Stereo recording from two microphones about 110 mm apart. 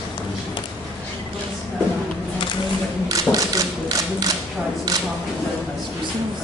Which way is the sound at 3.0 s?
35° right (ahead or behind).